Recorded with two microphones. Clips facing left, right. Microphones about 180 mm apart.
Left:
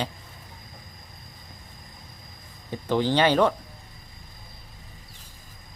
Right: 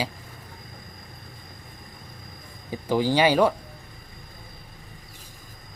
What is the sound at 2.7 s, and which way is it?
Speech, 10° right (ahead or behind).